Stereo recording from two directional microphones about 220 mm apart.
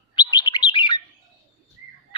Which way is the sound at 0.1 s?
20° left (ahead or behind).